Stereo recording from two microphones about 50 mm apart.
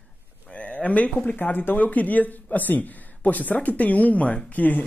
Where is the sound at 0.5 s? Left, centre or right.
Left.